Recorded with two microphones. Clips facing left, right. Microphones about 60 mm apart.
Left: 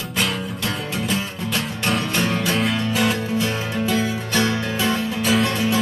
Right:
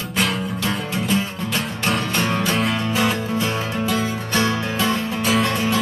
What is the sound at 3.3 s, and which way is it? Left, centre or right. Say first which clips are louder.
Music: even; right.